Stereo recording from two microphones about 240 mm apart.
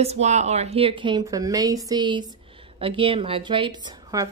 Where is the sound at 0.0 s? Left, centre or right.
Right.